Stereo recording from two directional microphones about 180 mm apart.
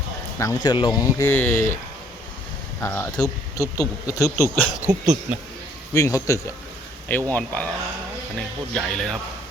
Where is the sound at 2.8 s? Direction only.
10° left (ahead or behind).